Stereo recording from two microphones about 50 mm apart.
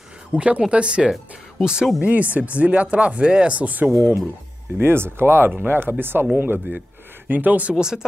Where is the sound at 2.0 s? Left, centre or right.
Right.